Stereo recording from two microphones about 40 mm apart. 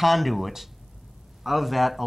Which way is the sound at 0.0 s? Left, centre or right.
Centre.